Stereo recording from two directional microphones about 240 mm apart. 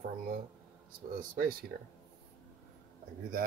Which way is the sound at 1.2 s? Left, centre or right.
Right.